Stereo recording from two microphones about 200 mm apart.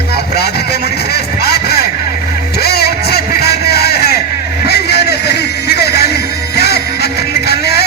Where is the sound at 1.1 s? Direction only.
55° left (ahead or behind).